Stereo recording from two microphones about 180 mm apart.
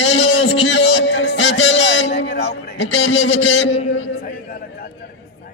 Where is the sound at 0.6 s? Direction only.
85° left.